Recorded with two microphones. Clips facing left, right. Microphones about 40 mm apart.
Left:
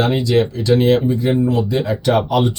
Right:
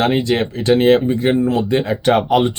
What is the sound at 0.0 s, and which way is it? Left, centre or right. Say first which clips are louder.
Speech: even; right.